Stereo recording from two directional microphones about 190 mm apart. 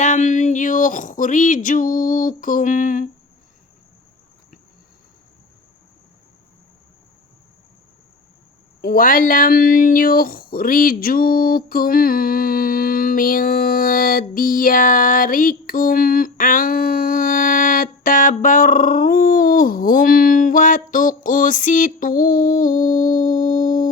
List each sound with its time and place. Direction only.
0.0 s speech: 40° left (ahead or behind)
8.8 s speech: 50° left (ahead or behind)